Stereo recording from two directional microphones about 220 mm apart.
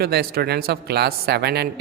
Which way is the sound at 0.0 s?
45° right (ahead or behind).